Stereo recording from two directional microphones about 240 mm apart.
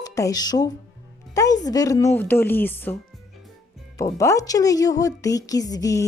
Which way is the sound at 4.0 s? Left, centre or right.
Centre.